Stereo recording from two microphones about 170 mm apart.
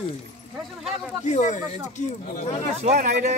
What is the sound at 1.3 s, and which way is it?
Speech, 45° left (ahead or behind).